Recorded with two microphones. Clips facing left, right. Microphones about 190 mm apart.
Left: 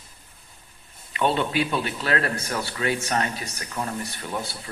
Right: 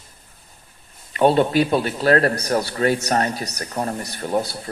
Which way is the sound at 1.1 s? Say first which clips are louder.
Right 7 dB; 40° right (ahead or behind).